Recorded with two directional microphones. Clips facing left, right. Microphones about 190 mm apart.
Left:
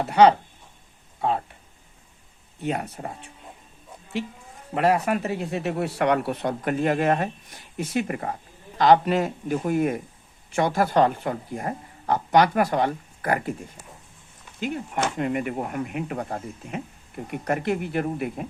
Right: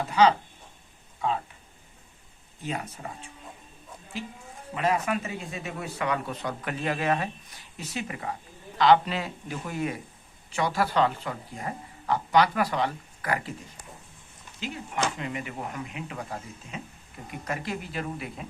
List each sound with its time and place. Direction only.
0.0 s speech: 60° left (ahead or behind)
2.6 s speech: 65° left (ahead or behind)
4.7 s speech: 65° left (ahead or behind)
6.5 s speech: 45° left (ahead or behind)
14.6 s speech: 50° left (ahead or behind)